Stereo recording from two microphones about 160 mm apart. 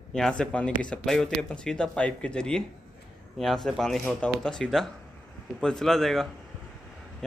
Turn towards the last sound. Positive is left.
turn(degrees=0)  # may be behind; listen again after turning